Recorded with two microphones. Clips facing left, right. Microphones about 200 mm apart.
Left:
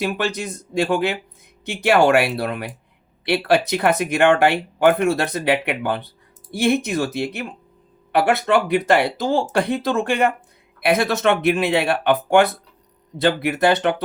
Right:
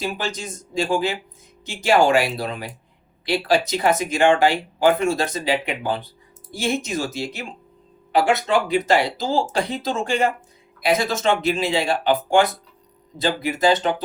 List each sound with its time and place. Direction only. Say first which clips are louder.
0.0 s speech: left 4 dB; 60° left (ahead or behind)